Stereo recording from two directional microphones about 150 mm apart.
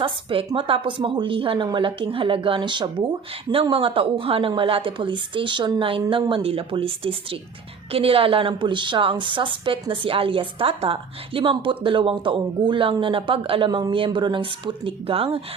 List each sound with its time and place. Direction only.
0.0 s speech: 35° right (ahead or behind)